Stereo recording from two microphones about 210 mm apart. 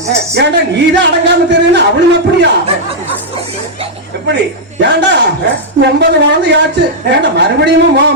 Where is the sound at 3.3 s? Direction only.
30° right (ahead or behind).